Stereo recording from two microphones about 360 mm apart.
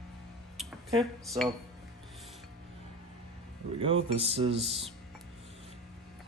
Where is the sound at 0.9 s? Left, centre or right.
Centre.